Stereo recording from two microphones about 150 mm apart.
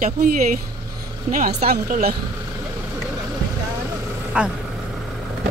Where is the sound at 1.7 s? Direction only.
80° right.